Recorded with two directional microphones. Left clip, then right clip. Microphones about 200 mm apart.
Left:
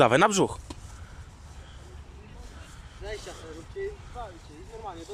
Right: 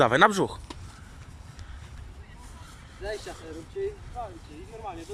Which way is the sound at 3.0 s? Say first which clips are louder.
Right 4 dB; 20° right (ahead or behind).